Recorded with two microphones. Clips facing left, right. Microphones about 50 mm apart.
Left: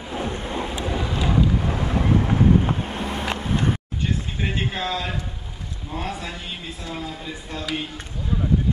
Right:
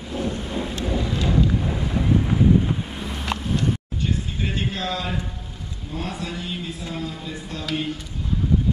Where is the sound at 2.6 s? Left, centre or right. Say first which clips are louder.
Left 2 dB; left.